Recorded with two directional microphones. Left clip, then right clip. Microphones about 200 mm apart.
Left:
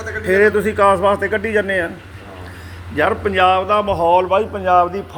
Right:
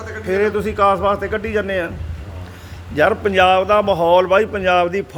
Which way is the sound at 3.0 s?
40° right (ahead or behind).